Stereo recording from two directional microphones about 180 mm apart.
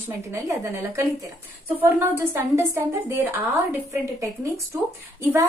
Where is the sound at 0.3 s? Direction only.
15° right (ahead or behind).